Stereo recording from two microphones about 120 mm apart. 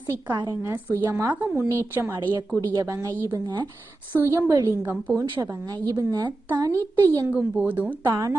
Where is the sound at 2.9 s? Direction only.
20° right (ahead or behind).